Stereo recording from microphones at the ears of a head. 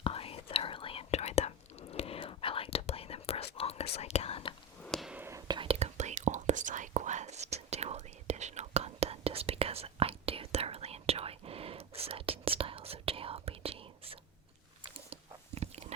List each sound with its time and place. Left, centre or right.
0.0 s whispering: left
5.5 s whispering: right
15.1 s biting: right